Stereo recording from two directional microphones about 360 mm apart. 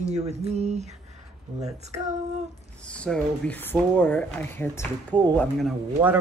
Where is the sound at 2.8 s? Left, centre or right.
Centre.